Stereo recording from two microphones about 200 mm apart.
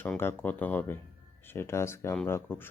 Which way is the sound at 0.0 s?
10° left (ahead or behind).